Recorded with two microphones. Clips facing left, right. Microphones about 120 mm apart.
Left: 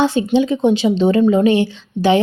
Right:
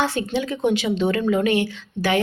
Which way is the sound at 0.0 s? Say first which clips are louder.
Left 8 dB; 20° left (ahead or behind).